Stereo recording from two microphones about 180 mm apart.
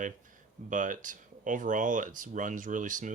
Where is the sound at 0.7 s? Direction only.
45° right (ahead or behind).